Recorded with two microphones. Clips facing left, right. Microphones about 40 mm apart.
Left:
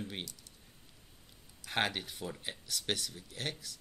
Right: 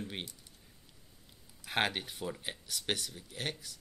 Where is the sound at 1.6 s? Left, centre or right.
Centre.